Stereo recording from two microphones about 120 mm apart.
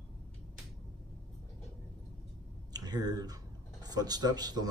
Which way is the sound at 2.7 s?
35° right (ahead or behind).